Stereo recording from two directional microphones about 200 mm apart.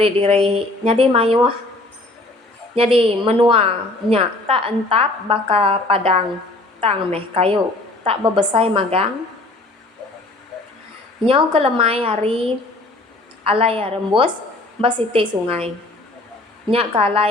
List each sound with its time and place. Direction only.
0.0 s a woman's voice: 30° right (ahead or behind)
2.7 s a woman's voice: 30° right (ahead or behind)
11.3 s a woman's voice: 30° right (ahead or behind)